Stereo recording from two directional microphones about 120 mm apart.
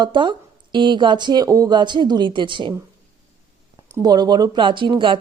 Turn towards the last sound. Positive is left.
turn(degrees=-40)  # may be behind; listen again after turning